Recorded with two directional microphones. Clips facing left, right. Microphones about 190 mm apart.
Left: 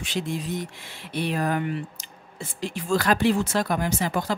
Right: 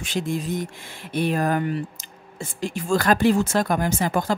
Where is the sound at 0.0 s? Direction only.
45° right (ahead or behind).